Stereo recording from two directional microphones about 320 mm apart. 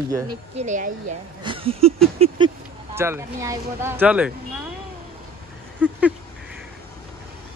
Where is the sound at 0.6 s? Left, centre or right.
Right; by 4.3 s centre.